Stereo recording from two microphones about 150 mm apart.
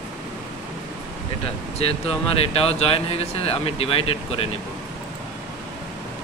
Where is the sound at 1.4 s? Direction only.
40° left (ahead or behind).